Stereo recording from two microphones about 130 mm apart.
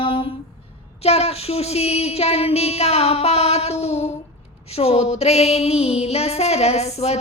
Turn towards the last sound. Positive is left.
turn(degrees=55)  # may be behind; listen again after turning